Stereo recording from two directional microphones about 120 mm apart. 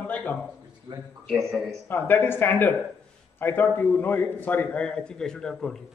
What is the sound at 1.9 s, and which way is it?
A man's voice, 20° left (ahead or behind).